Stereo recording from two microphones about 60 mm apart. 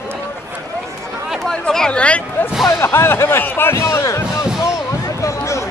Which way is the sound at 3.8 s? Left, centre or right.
Left.